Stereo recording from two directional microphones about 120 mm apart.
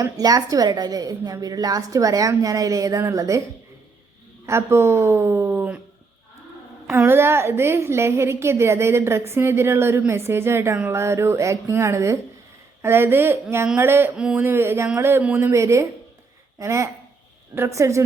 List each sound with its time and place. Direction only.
0.0 s a woman's voice: 30° right (ahead or behind)
4.4 s speech: 20° right (ahead or behind)
6.9 s a woman's voice: 20° right (ahead or behind)
14.2 s speech: 10° right (ahead or behind)
14.4 s a woman's voice: 20° right (ahead or behind)